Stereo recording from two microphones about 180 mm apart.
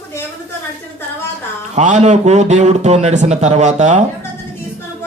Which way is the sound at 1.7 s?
40° right (ahead or behind).